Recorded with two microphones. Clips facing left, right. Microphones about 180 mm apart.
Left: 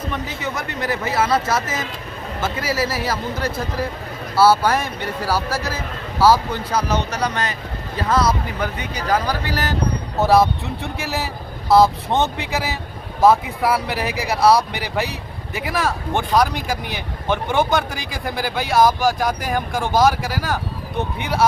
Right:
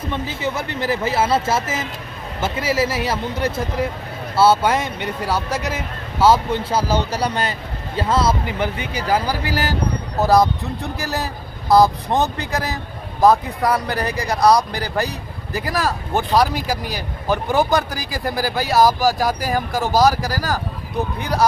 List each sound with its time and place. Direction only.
0.1 s speech: 30° right (ahead or behind)
10.2 s a man's voice: centre (ahead or behind)